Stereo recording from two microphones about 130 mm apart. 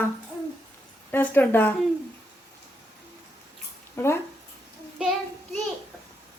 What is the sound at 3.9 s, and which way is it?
Speech, 20° left (ahead or behind).